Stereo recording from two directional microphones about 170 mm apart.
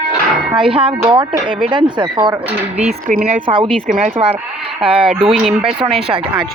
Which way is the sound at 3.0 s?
50° right (ahead or behind).